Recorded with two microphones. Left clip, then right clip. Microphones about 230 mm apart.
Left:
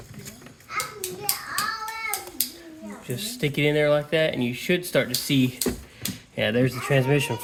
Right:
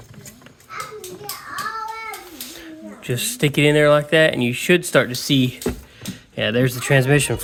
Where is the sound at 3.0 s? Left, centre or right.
Right.